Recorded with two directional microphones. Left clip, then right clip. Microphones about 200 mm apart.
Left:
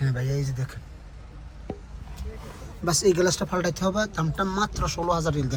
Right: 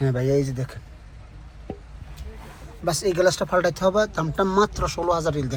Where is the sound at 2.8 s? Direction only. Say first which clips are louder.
Right 1 dB; 5° left (ahead or behind).